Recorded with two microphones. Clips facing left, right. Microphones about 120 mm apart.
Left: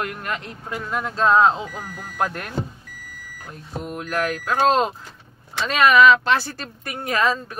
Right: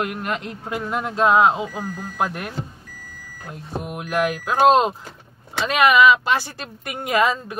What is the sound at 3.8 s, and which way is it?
Speech, 15° right (ahead or behind).